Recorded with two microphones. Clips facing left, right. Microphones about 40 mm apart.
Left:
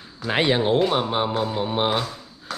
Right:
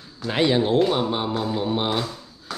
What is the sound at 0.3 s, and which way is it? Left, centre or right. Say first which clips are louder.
Speech: even; left.